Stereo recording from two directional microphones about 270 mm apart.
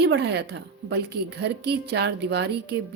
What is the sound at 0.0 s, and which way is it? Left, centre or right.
A woman's voice, right.